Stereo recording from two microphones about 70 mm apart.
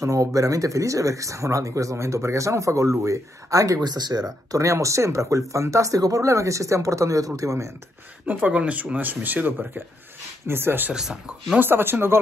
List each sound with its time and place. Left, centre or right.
0.0 s speech: right
3.8 s speech: right
4.5 s speech: right
8.3 s speech: right
10.9 s speech: centre
11.6 s speech: right